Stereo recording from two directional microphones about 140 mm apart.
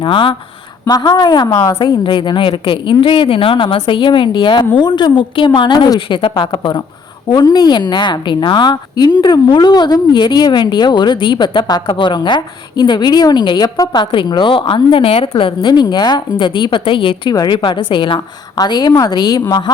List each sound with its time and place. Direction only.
0.0 s a woman's voice: 35° left (ahead or behind)